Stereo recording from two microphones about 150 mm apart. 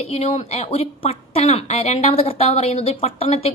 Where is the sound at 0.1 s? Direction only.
45° left (ahead or behind).